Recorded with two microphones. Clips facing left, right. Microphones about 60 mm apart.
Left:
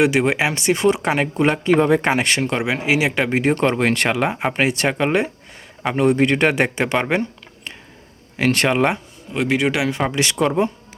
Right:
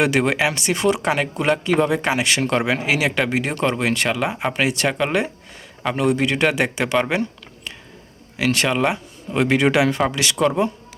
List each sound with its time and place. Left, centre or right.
0.0 s speech: centre
0.4 s speech: left
2.4 s speech: centre
3.2 s speech: left
7.1 s a sound: left
8.4 s speech: left
9.3 s speech: centre
10.1 s speech: left